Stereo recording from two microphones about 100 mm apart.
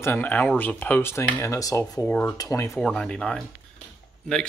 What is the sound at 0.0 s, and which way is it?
Speech, 20° left (ahead or behind).